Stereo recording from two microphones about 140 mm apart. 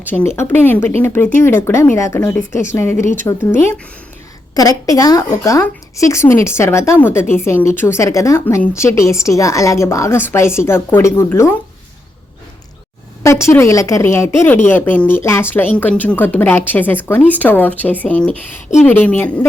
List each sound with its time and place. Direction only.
0.0 s a woman's voice: 15° left (ahead or behind)
13.2 s a woman's voice: 20° left (ahead or behind)